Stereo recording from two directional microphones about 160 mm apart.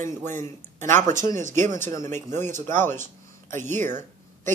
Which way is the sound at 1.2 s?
50° right (ahead or behind).